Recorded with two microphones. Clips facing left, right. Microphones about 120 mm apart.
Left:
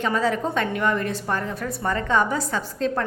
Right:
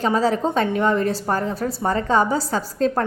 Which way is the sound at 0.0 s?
30° right (ahead or behind).